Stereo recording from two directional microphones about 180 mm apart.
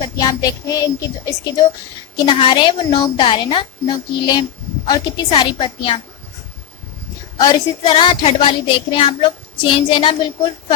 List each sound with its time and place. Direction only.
0.2 s speech: 20° left (ahead or behind)
7.3 s speech: 25° left (ahead or behind)